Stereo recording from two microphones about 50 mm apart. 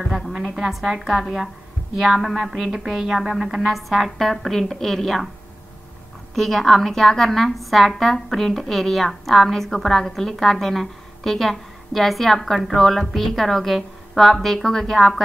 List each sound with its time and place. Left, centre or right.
0.3 s a woman's voice: centre
6.3 s a woman's voice: centre